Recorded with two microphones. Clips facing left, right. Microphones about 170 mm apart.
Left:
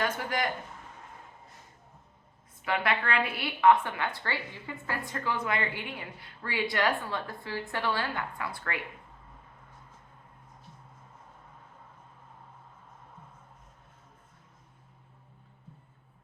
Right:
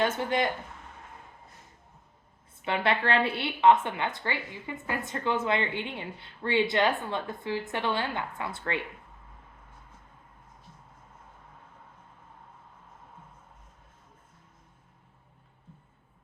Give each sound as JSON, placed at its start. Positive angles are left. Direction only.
{"t": 0.0, "sound": "a woman's voice", "side_deg": -25}
{"t": 2.6, "sound": "a woman's voice", "side_deg": -30}